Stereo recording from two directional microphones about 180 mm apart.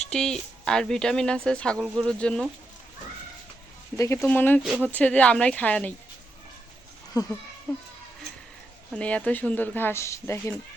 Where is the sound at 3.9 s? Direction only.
15° left (ahead or behind).